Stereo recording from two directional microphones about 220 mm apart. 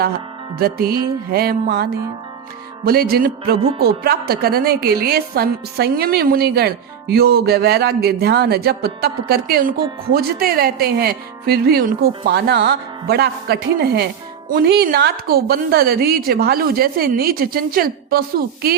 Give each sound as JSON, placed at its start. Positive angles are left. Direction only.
{"t": 0.6, "sound": "a woman's voice", "side_deg": -45}